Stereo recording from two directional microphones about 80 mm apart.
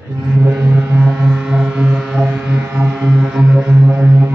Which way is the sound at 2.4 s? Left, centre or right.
Right.